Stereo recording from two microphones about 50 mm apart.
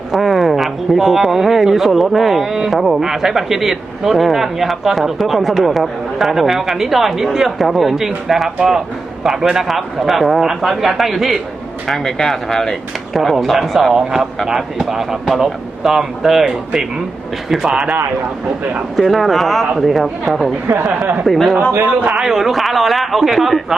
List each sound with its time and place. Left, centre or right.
0.1 s speech: centre
11.9 s speech: centre
13.4 s speech: centre
18.9 s speech: centre
20.7 s speech: right
21.2 s speech: centre
21.8 s a man's voice: right
22.3 s speech: centre